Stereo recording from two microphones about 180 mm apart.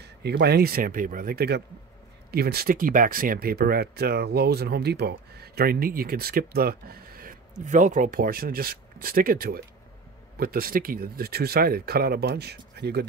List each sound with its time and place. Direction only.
0.0 s speech: 65° right (ahead or behind)